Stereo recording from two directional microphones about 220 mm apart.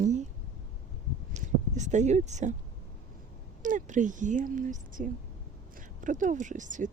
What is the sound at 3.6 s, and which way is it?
Speech, 35° right (ahead or behind).